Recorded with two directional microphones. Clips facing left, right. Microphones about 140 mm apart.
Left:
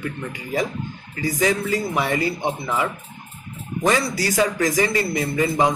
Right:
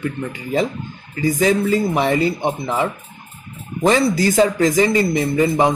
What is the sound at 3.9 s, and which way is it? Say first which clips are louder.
Speech: right 6 dB; 25° right (ahead or behind).